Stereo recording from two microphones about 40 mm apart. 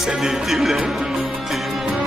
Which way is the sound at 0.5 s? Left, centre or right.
Centre.